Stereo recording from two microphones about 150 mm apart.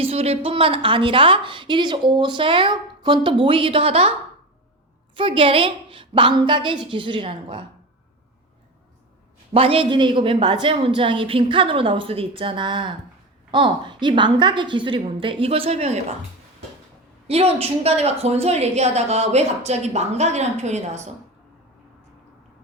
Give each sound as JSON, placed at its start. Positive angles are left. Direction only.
{"t": 0.0, "sound": "a woman's voice", "side_deg": -40}
{"t": 5.1, "sound": "a woman's voice", "side_deg": -35}
{"t": 9.5, "sound": "a woman's voice", "side_deg": -40}
{"t": 17.2, "sound": "a woman's voice", "side_deg": -40}